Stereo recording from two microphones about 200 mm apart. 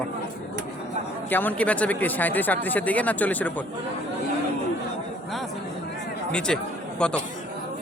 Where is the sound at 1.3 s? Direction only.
10° left (ahead or behind).